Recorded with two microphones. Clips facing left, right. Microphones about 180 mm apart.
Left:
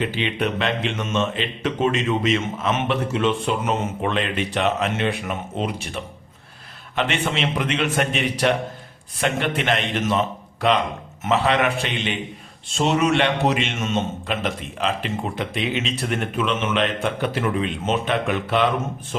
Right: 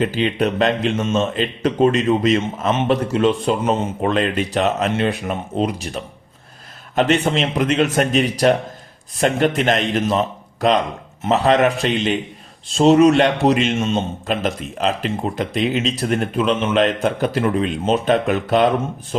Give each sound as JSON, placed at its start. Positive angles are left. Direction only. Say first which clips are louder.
{"t": 0.0, "sound": "a man's voice", "louder": "right 5 dB", "side_deg": -40}